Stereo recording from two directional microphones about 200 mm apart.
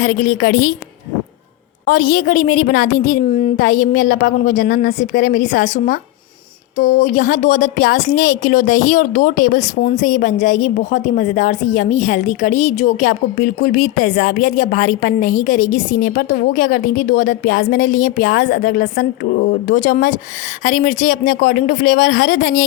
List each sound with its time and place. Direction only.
0.0 s a woman's voice: 45° left (ahead or behind)
1.8 s a woman's voice: 45° left (ahead or behind)